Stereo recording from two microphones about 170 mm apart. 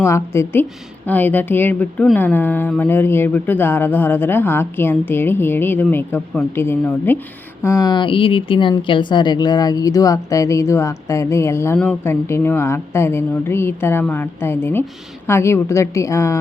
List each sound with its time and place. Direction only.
0.0 s speech: 15° left (ahead or behind)